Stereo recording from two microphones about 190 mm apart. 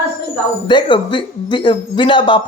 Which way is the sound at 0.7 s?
25° left (ahead or behind).